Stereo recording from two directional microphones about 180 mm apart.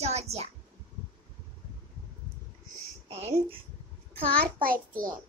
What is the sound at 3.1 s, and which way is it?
Speech, 35° right (ahead or behind).